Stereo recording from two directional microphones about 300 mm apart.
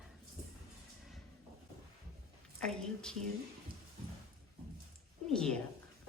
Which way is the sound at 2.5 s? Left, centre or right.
Centre.